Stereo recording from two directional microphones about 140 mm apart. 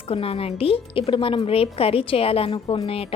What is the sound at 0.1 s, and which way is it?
A woman's voice, 45° left (ahead or behind).